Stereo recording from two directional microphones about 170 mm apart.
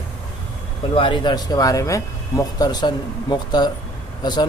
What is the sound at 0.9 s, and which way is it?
A man's voice, 30° left (ahead or behind).